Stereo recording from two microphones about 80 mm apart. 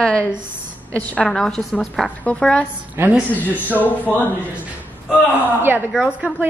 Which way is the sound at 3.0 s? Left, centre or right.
Right.